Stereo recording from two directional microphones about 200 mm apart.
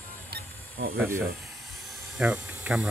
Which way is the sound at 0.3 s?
55° right (ahead or behind).